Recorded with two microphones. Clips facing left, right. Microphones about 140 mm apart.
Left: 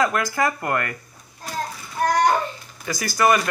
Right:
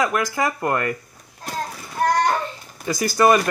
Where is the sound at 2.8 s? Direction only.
30° right (ahead or behind).